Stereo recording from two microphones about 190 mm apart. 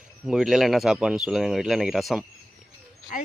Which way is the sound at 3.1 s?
40° left (ahead or behind).